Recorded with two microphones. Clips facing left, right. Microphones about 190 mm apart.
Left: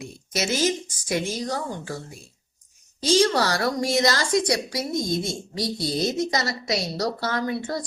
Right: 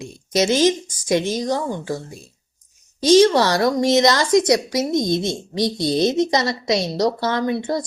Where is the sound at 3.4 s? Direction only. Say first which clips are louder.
Right 6 dB; 25° right (ahead or behind).